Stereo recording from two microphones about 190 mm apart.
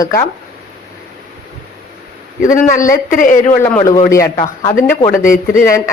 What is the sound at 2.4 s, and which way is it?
Speech, 45° left (ahead or behind).